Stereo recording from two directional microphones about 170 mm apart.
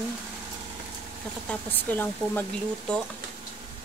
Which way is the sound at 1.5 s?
10° left (ahead or behind).